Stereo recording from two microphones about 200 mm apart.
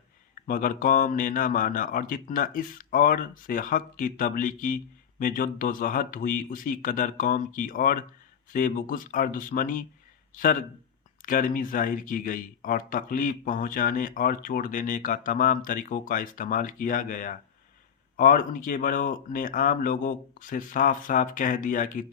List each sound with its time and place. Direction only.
0.4 s speech: 45° left (ahead or behind)